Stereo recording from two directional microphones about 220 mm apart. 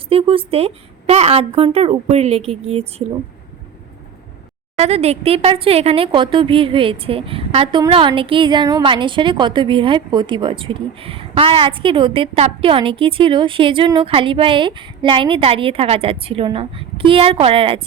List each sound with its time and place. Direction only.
0.1 s a woman's voice: 25° right (ahead or behind)
4.8 s a woman's voice: 30° right (ahead or behind)